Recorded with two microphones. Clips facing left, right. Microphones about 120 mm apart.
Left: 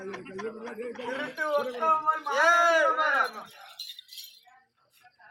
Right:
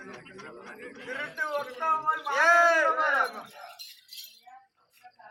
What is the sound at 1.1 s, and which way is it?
Speech, 5° left (ahead or behind).